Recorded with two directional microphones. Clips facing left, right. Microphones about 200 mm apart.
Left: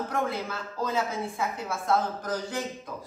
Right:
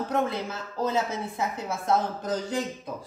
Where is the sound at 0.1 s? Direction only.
20° right (ahead or behind).